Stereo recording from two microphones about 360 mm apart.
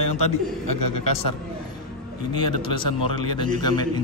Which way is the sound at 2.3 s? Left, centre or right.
Centre.